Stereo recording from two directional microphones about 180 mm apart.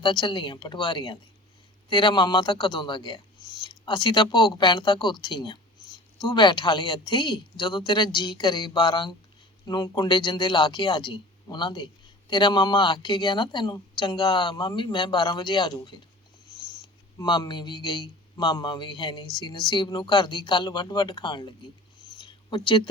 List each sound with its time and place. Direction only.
0.0 s speech: 25° left (ahead or behind)
17.2 s speech: 25° left (ahead or behind)
22.2 s a sound: 25° left (ahead or behind)